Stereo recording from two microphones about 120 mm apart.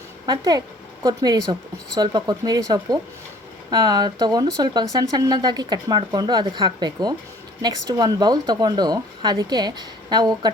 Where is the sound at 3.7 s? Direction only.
35° right (ahead or behind).